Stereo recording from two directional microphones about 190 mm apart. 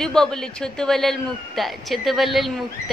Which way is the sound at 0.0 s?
5° left (ahead or behind).